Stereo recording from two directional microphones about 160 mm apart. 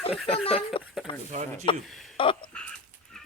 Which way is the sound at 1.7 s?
30° left (ahead or behind).